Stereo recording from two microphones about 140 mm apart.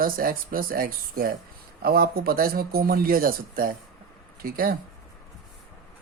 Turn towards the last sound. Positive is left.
turn(degrees=-90)